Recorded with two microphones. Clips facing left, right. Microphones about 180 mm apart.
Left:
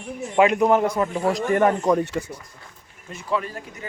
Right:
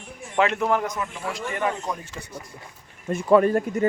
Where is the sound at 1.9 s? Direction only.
70° left (ahead or behind).